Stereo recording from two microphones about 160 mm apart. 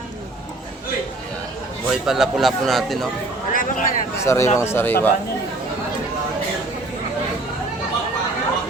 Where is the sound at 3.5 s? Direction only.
60° left (ahead or behind).